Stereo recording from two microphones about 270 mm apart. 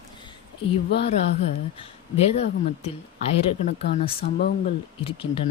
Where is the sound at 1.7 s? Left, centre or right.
Left.